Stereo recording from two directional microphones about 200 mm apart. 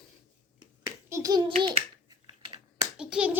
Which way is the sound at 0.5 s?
15° right (ahead or behind).